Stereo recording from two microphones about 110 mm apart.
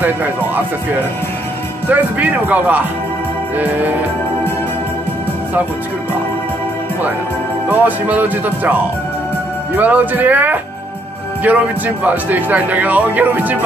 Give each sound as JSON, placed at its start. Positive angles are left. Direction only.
{"t": 0.0, "sound": "speech", "side_deg": -15}
{"t": 1.9, "sound": "speech", "side_deg": -15}
{"t": 7.6, "sound": "speech", "side_deg": -15}
{"t": 9.8, "sound": "speech", "side_deg": -15}